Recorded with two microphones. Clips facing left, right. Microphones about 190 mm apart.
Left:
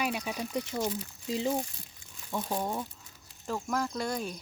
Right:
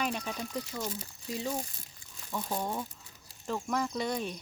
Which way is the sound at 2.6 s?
5° left (ahead or behind).